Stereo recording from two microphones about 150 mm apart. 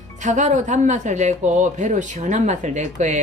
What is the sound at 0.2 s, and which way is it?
A woman's voice, 55° right (ahead or behind).